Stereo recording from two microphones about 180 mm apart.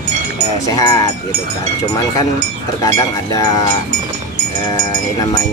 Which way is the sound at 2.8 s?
20° left (ahead or behind).